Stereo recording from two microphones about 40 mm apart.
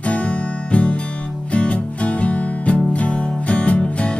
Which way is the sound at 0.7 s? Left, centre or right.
Left.